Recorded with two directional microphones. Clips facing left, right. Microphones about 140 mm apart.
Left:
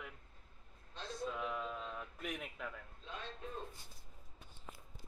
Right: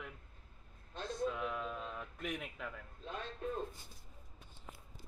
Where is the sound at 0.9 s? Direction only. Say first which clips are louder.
Right 5 dB; 50° right (ahead or behind).